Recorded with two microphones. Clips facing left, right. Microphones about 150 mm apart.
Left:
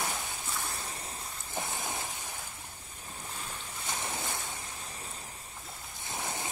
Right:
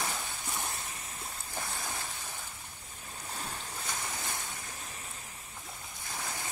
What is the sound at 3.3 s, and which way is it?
Boat, 35° right (ahead or behind).